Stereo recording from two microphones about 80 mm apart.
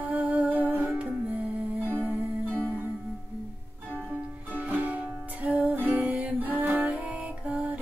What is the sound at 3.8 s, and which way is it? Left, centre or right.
Music, centre.